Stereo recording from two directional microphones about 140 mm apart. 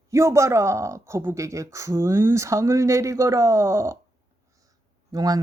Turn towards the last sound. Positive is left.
turn(degrees=-25)  # may be behind; listen again after turning